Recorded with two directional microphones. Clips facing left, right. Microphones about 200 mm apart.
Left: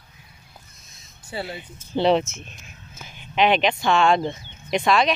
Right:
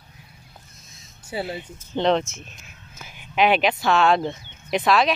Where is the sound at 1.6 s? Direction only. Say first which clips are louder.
Left 6 dB; 5° left (ahead or behind).